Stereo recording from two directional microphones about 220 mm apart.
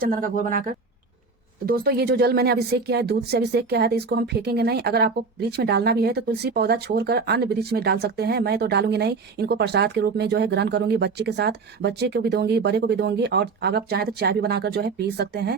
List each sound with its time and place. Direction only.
0.0 s speech: 40° right (ahead or behind)